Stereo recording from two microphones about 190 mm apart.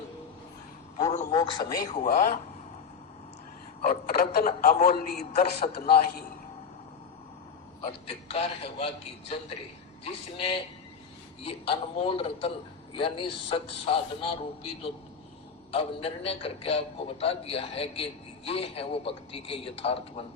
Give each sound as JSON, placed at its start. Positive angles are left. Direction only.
{"t": 1.3, "sound": "a man's voice", "side_deg": 20}
{"t": 1.8, "sound": "a man's voice", "side_deg": 40}
{"t": 3.8, "sound": "a man's voice", "side_deg": 55}
{"t": 7.8, "sound": "a man's voice", "side_deg": 30}
{"t": 10.0, "sound": "a man's voice", "side_deg": 30}